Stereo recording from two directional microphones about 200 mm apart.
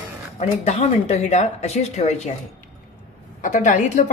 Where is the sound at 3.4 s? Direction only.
40° left (ahead or behind).